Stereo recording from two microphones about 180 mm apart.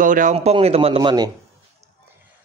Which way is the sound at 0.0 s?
45° right (ahead or behind).